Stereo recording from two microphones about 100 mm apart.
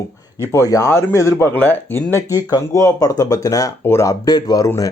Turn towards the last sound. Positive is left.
turn(degrees=30)  # may be behind; listen again after turning